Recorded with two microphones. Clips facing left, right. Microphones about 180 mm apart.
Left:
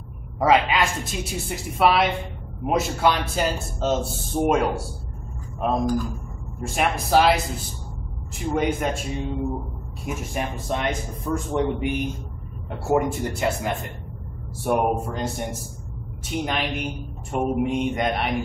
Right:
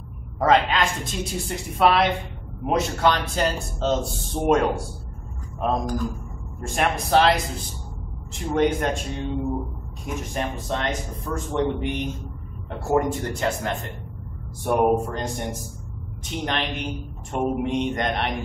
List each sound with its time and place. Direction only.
0.4 s a man's voice: 5° left (ahead or behind)
1.8 s mantra: 5° left (ahead or behind)
2.6 s a man's voice: 5° left (ahead or behind)
4.5 s mantra: 5° left (ahead or behind)
8.4 s mantra: 5° left (ahead or behind)
10.0 s a man's voice: 10° left (ahead or behind)
14.6 s mantra: 5° left (ahead or behind)
16.3 s a man's voice: 5° left (ahead or behind)
17.3 s mantra: 5° left (ahead or behind)